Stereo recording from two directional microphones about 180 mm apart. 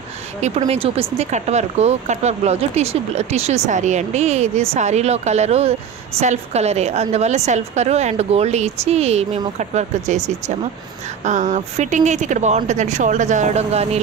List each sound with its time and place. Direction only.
0.4 s speech: 35° right (ahead or behind)